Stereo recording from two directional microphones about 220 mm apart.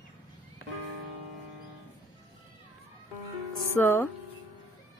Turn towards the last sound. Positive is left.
turn(degrees=10)  # may be behind; listen again after turning